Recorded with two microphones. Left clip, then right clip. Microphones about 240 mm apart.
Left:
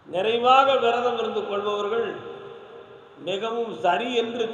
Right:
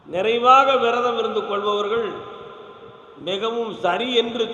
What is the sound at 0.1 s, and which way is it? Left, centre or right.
A man's voice, right.